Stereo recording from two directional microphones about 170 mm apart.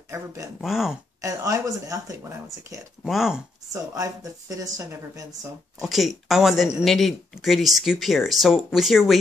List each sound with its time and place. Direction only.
0.6 s speech: centre (ahead or behind)
1.2 s speech: 20° right (ahead or behind)
3.0 s speech: centre (ahead or behind)
3.7 s a woman's voice: 20° right (ahead or behind)
5.8 s speech: centre (ahead or behind)